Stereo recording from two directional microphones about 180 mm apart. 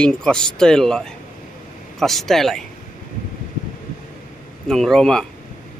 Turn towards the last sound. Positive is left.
turn(degrees=5)  # may be behind; listen again after turning